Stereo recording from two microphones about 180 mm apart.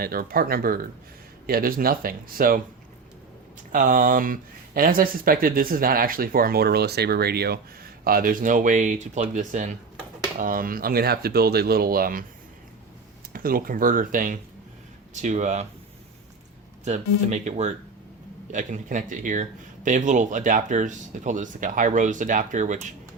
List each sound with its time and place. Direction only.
0.0 s speech: 55° right (ahead or behind)
3.7 s speech: 50° right (ahead or behind)
13.3 s speech: 55° right (ahead or behind)
16.8 s speech: 40° right (ahead or behind)